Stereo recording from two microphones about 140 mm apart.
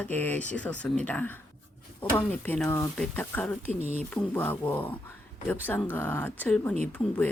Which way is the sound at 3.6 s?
50° right (ahead or behind).